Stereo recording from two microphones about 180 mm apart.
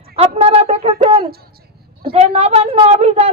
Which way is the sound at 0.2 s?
35° right (ahead or behind).